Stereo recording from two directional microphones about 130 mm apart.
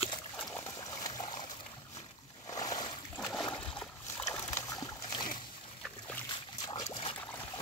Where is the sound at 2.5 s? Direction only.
30° left (ahead or behind).